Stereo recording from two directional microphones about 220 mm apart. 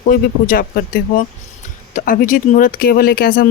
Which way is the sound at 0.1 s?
40° left (ahead or behind).